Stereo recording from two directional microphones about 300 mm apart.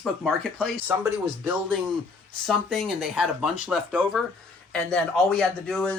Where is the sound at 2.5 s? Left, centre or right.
Centre.